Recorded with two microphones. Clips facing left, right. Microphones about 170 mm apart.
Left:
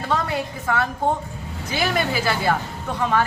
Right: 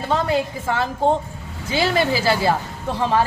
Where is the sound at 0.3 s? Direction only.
25° right (ahead or behind).